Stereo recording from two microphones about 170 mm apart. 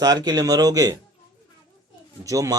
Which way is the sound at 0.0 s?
25° right (ahead or behind).